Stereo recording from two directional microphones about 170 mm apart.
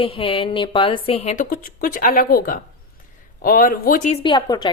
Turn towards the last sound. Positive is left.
turn(degrees=25)  # may be behind; listen again after turning